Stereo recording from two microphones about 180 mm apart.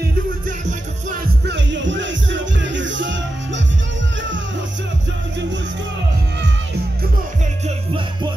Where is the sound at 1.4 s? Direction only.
85° right.